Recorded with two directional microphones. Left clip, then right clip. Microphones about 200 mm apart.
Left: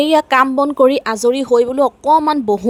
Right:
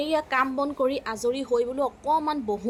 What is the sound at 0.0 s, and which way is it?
A woman's voice, 55° left (ahead or behind).